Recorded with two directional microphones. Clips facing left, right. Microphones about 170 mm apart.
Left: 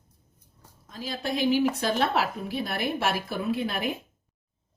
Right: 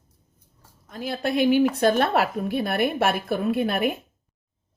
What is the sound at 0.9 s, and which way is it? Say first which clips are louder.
A woman's voice: right 5 dB; 60° right (ahead or behind).